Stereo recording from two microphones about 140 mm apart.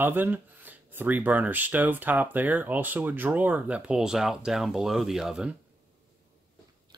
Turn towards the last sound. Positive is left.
turn(degrees=-5)  # may be behind; listen again after turning